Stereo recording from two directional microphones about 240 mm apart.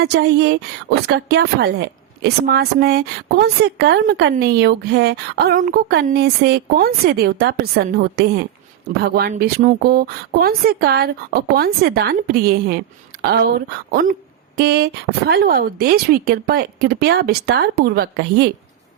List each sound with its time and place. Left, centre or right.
0.0 s a woman's voice: right
13.9 s a woman's voice: right